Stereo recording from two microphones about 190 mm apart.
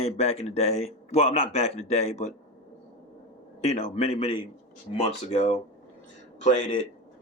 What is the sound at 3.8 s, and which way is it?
A man's voice, 35° left (ahead or behind).